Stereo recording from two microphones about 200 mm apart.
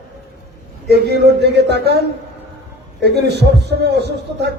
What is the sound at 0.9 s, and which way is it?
A man's voice, 55° right (ahead or behind).